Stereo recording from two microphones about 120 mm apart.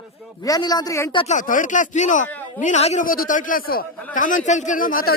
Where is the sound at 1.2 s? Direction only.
90° left.